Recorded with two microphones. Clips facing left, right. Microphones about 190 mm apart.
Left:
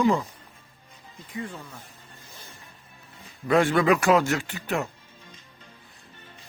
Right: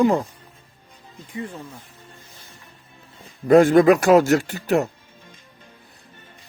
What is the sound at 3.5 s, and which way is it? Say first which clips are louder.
Speech: right 8 dB; 40° right (ahead or behind).